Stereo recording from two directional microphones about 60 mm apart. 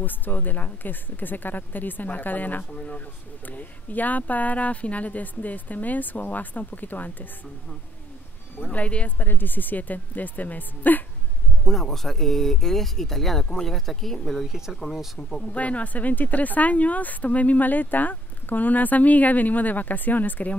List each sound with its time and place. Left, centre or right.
0.0 s speech: left
8.7 s speech: left
11.6 s speech: centre
14.4 s speech: centre
15.1 s speech: centre
15.4 s speech: left